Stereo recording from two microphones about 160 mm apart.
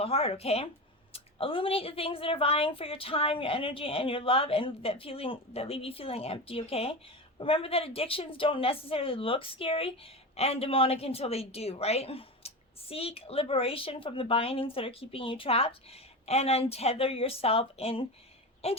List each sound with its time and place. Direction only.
0.0 s a woman's voice: 35° left (ahead or behind)